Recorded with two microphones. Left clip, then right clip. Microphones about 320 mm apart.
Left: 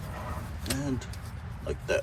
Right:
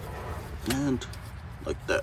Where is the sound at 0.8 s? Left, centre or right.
Centre.